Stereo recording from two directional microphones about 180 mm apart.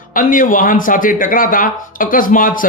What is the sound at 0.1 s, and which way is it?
Speech, 50° left (ahead or behind).